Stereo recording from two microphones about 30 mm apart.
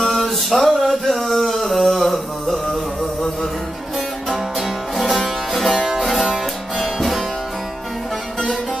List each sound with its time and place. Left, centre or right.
0.0 s music: centre
1.0 s a sound: centre
4.6 s music: centre